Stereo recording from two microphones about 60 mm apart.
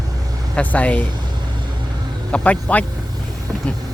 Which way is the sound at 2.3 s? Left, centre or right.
Centre.